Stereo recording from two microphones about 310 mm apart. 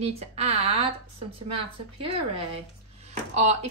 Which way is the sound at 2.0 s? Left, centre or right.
Centre.